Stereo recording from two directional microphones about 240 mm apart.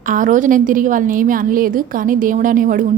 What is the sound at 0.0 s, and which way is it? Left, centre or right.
A woman's voice, right.